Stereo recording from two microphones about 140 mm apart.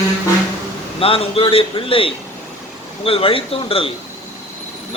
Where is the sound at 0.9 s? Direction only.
40° left (ahead or behind).